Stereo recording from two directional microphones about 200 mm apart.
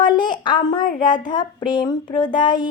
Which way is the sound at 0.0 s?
20° left (ahead or behind).